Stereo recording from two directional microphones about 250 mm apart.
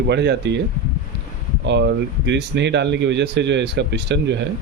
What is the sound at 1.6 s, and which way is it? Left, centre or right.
Speech, right.